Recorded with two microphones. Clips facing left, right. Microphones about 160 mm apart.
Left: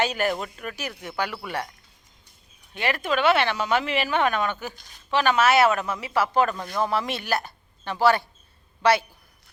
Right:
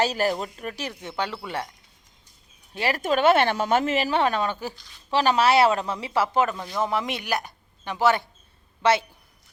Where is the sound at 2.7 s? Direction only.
35° right (ahead or behind).